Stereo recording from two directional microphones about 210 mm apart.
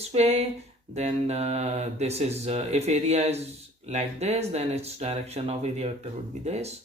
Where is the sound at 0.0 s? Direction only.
30° right (ahead or behind).